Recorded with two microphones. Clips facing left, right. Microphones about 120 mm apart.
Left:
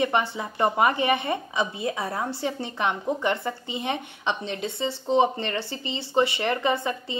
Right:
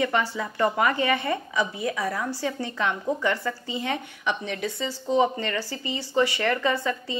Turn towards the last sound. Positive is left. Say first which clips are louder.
# even
turn(degrees=20)  # may be behind; listen again after turning